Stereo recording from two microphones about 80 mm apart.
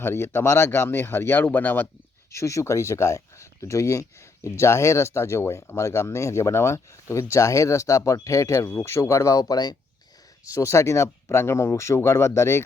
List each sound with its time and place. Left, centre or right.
0.0 s speech: left
2.3 s speech: left
10.4 s speech: left